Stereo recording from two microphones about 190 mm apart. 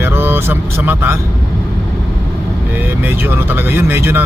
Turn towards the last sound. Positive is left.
turn(degrees=-10)  # may be behind; listen again after turning